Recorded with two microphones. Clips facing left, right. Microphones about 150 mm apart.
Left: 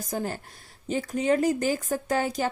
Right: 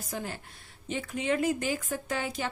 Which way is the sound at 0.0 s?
40° left (ahead or behind).